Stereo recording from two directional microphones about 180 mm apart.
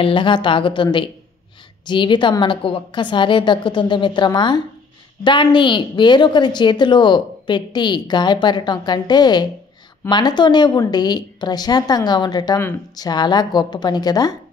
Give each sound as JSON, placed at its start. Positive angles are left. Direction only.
{"t": 0.0, "sound": "a woman's voice", "side_deg": 25}